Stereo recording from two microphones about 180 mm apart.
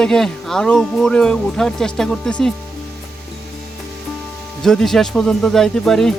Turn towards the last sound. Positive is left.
turn(degrees=0)  # may be behind; listen again after turning